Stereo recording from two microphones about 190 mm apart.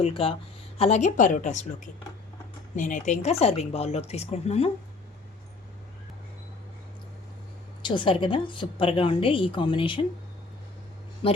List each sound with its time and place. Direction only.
0.0 s a woman's voice: 30° left (ahead or behind)
7.8 s a woman's voice: 25° left (ahead or behind)
11.2 s speech: 30° left (ahead or behind)